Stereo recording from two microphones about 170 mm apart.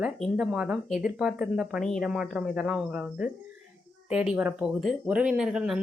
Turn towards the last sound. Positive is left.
turn(degrees=-5)  # may be behind; listen again after turning